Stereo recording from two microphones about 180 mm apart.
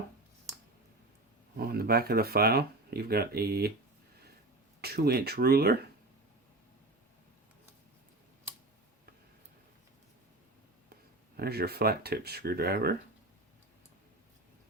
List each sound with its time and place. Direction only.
1.5 s speech: 60° right (ahead or behind)
4.8 s speech: 60° right (ahead or behind)
11.3 s speech: 60° right (ahead or behind)